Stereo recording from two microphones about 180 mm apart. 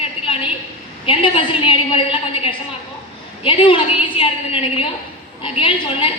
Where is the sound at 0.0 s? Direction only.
30° left (ahead or behind).